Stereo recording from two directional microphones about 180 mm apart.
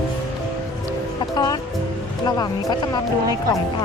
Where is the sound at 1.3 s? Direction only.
20° left (ahead or behind).